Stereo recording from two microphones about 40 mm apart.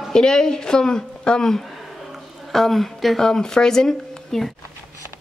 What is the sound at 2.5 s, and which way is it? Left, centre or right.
Speech, centre.